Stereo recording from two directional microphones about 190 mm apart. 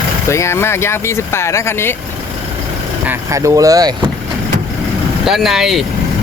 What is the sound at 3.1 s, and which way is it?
Speech, 15° right (ahead or behind).